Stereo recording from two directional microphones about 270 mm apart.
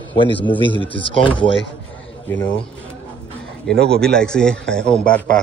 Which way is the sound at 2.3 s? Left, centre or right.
Centre.